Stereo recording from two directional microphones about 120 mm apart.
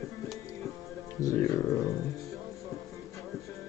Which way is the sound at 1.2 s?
25° left (ahead or behind).